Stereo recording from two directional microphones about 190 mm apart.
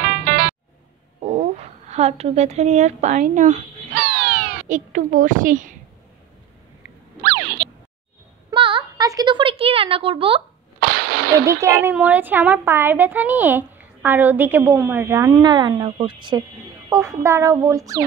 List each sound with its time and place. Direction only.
1.2 s speech: 35° right (ahead or behind)
4.0 s cat: 55° right (ahead or behind)
7.2 s boing: 60° right (ahead or behind)
8.5 s a sound: 25° right (ahead or behind)
10.8 s a sound: 50° right (ahead or behind)
11.4 s a woman's voice: 15° right (ahead or behind)